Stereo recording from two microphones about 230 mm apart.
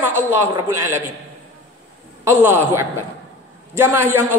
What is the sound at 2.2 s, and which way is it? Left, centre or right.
A woman's voice, centre.